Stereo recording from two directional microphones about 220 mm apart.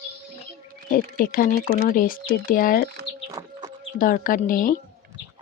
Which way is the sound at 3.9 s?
40° left (ahead or behind).